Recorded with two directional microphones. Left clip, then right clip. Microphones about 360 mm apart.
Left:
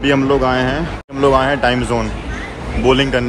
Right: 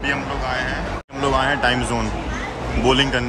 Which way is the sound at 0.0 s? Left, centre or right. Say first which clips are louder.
Left 9 dB; centre.